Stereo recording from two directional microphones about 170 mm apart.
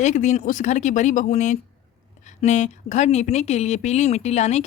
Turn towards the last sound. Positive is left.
turn(degrees=40)  # may be behind; listen again after turning